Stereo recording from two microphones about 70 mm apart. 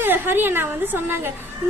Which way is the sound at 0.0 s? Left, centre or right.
Right.